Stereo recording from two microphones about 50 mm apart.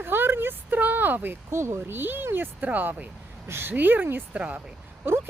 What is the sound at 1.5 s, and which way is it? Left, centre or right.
Speech, right.